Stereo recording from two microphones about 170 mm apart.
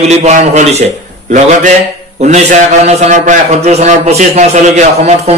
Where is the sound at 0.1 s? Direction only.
45° right (ahead or behind).